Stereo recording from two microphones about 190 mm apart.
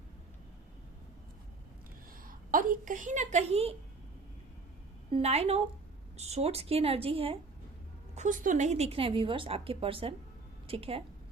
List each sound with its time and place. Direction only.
2.2 s speech: 45° right (ahead or behind)
5.1 s speech: 35° right (ahead or behind)
8.1 s a woman's voice: 40° right (ahead or behind)